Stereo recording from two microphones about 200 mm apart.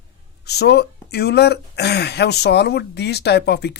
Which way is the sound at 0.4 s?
55° left (ahead or behind).